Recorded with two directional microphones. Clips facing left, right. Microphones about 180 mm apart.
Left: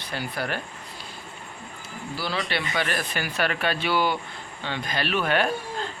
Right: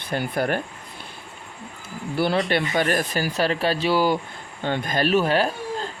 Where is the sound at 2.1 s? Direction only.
55° right (ahead or behind); by 4.2 s 35° right (ahead or behind).